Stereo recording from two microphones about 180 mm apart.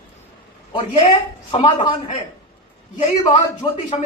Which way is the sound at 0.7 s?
30° left (ahead or behind).